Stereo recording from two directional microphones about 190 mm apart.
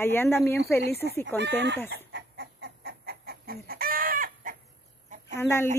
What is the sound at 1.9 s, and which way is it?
Chicken, 65° right (ahead or behind).